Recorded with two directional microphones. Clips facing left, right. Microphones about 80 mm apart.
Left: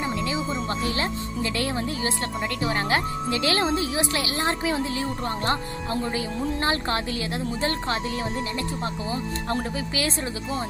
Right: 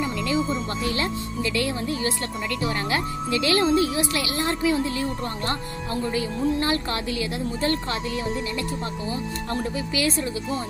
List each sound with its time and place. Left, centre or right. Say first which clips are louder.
0.8 s speech: right 1 dB; left